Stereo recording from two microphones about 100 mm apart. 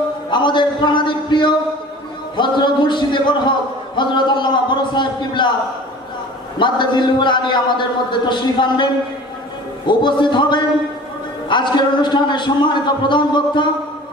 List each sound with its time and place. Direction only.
0.3 s a man's voice: 50° left (ahead or behind)
6.6 s a man's voice: 50° left (ahead or behind)
9.8 s a man's voice: 50° left (ahead or behind)